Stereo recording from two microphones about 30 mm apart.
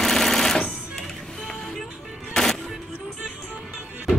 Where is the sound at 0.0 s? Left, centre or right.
Centre.